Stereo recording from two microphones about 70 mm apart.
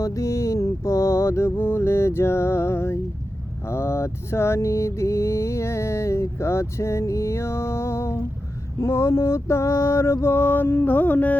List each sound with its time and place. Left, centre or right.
0.0 s mantra: left